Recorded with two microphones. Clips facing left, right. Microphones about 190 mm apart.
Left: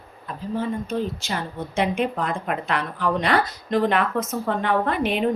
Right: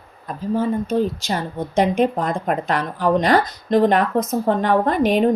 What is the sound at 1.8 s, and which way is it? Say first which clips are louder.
Speech: right 5 dB; 40° right (ahead or behind).